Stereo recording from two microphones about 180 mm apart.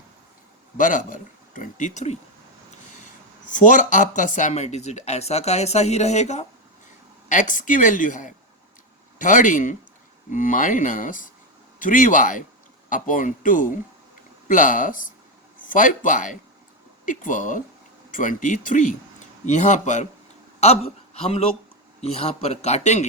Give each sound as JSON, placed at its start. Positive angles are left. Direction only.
{"t": 0.8, "sound": "speech", "side_deg": 45}
{"t": 3.5, "sound": "a man's voice", "side_deg": 45}